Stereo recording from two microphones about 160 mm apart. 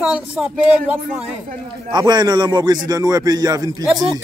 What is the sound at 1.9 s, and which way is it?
Speech, 25° right (ahead or behind).